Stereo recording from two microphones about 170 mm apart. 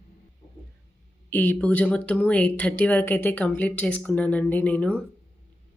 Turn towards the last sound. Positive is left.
turn(degrees=10)  # may be behind; listen again after turning